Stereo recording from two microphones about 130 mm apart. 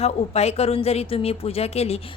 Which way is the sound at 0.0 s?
55° left (ahead or behind).